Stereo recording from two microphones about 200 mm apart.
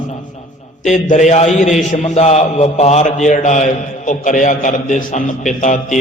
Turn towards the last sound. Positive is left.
turn(degrees=35)  # may be behind; listen again after turning